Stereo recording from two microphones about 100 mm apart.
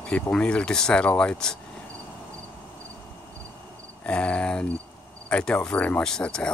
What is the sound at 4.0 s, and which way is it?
Cricket, 10° left (ahead or behind).